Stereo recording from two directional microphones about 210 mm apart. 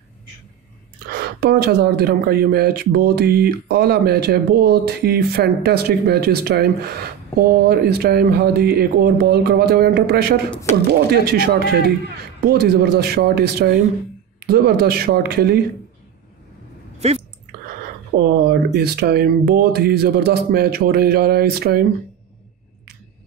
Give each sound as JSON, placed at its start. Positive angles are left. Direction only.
{"t": 1.1, "sound": "speech", "side_deg": -45}
{"t": 10.5, "sound": "speech", "side_deg": 10}
{"t": 10.9, "sound": "speech", "side_deg": -50}
{"t": 17.0, "sound": "speech", "side_deg": -30}
{"t": 18.2, "sound": "speech", "side_deg": -50}